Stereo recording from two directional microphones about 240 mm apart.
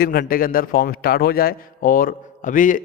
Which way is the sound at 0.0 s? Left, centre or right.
Left.